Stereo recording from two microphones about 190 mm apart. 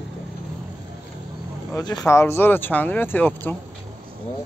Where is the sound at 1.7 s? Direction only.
20° left (ahead or behind).